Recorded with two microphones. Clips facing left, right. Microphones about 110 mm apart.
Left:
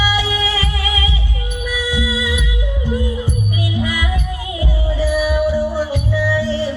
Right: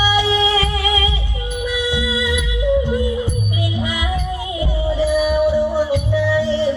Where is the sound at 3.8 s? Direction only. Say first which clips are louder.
Left 1 dB; 25° right (ahead or behind).